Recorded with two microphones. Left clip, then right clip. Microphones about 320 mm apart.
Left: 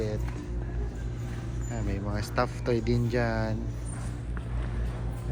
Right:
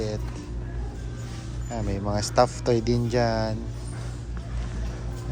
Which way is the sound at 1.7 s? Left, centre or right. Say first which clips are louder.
Right 7 dB; centre.